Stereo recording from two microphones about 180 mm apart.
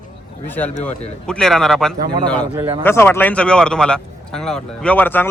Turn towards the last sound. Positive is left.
turn(degrees=10)  # may be behind; listen again after turning